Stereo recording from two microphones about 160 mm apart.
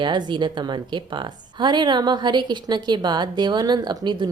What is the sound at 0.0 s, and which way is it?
A woman's voice, 30° right (ahead or behind).